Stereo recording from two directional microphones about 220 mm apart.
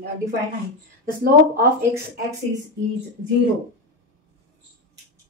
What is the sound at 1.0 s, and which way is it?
Speech, 40° right (ahead or behind).